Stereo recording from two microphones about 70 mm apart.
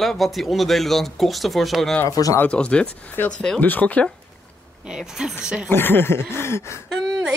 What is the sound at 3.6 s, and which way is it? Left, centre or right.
Speech, left.